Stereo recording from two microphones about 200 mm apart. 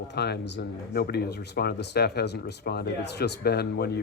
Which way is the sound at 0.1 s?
60° left (ahead or behind).